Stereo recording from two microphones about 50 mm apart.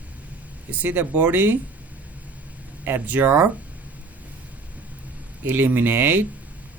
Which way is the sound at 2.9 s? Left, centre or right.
Right.